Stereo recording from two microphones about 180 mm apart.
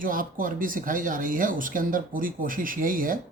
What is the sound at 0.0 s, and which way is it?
A man's voice, 50° right (ahead or behind).